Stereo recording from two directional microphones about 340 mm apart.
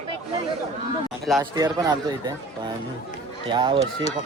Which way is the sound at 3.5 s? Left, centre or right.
Centre.